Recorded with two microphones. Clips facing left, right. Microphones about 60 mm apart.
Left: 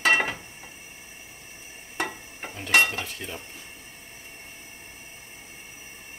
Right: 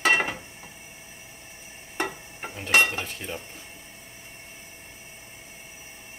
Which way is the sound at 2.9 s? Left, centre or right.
Right.